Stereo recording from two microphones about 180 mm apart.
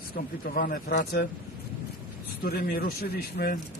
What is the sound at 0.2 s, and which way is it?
Speech, 60° left (ahead or behind).